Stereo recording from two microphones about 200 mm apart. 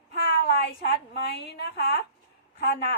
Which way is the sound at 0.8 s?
55° left (ahead or behind).